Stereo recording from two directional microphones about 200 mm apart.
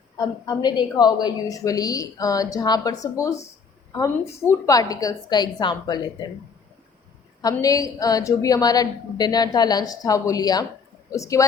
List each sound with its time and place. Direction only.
0.2 s a woman's voice: 20° left (ahead or behind)
7.4 s a woman's voice: 15° left (ahead or behind)